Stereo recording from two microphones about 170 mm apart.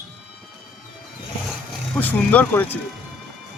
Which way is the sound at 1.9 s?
10° left (ahead or behind).